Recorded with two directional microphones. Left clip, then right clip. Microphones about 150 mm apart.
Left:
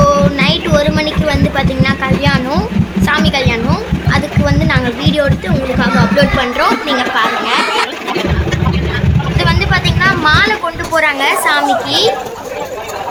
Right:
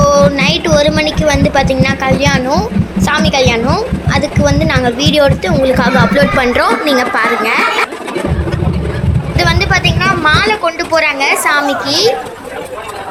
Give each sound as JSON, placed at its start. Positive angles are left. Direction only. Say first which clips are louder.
{"t": 0.0, "sound": "music", "louder": "right 2 dB", "side_deg": -15}
{"t": 0.3, "sound": "a sound", "louder": "right 2 dB", "side_deg": -15}
{"t": 3.3, "sound": "a woman's voice", "louder": "right 4 dB", "side_deg": -20}
{"t": 3.7, "sound": "a sound", "louder": "right 2 dB", "side_deg": -10}
{"t": 4.6, "sound": "speech", "louder": "right 3 dB", "side_deg": -15}
{"t": 5.7, "sound": "speech", "louder": "right 2 dB", "side_deg": -30}
{"t": 9.4, "sound": "vehicle", "louder": "right 3 dB", "side_deg": -15}
{"t": 10.0, "sound": "a sound", "louder": "left 3 dB", "side_deg": -10}
{"t": 10.9, "sound": "speech", "louder": "left 1 dB", "side_deg": -10}